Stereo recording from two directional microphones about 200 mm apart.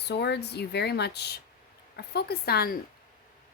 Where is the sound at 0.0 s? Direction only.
55° left (ahead or behind).